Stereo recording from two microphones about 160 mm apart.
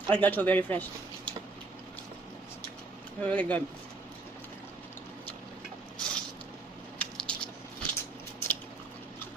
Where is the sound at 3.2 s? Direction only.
10° left (ahead or behind).